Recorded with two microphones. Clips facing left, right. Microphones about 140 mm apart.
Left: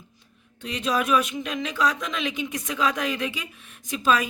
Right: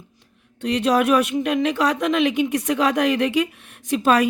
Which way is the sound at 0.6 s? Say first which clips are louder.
Right 7 dB; 70° right (ahead or behind).